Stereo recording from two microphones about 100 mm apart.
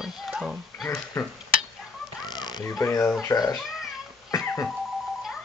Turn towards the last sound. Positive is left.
turn(degrees=25)  # may be behind; listen again after turning